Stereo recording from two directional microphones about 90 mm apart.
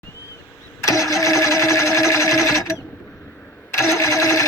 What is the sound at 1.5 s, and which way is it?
Sewing machine, 35° left (ahead or behind).